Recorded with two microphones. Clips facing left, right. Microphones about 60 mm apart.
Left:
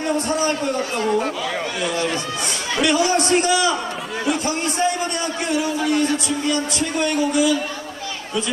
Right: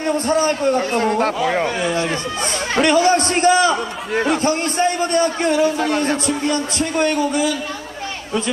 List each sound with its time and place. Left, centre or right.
0.0 s a man's voice: right